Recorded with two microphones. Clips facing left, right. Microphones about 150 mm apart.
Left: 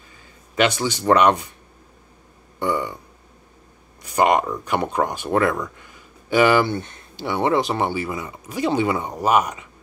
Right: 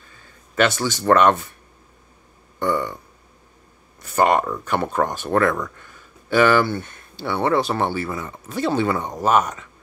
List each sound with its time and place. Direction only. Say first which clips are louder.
0.6 s speech: even; 15° left (ahead or behind)
2.6 s speech: right 1 dB; 15° left (ahead or behind)
4.0 s speech: even; 15° left (ahead or behind)